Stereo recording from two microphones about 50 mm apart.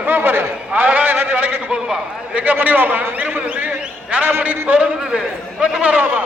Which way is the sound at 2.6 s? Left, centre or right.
Right.